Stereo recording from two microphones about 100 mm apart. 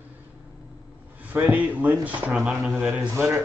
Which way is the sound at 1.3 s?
15° right (ahead or behind).